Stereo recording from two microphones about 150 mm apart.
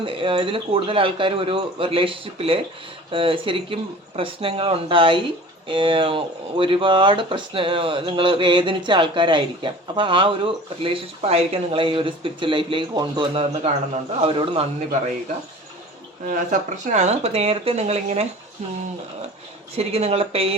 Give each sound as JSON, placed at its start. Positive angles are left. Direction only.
{"t": 0.0, "sound": "speech", "side_deg": -35}
{"t": 16.2, "sound": "speech", "side_deg": -55}
{"t": 19.7, "sound": "speech", "side_deg": -45}